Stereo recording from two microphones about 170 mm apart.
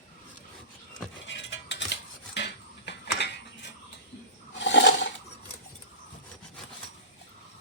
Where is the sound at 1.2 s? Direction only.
90° left.